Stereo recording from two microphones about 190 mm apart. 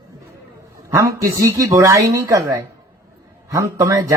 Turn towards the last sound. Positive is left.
turn(degrees=-15)  # may be behind; listen again after turning